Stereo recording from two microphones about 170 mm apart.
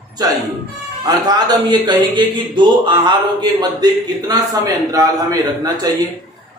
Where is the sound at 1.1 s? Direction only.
25° right (ahead or behind).